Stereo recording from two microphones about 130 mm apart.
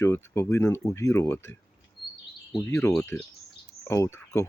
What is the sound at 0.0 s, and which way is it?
Speech, 20° left (ahead or behind).